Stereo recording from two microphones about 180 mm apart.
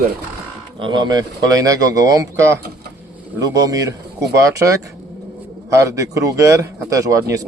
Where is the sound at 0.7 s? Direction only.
25° right (ahead or behind).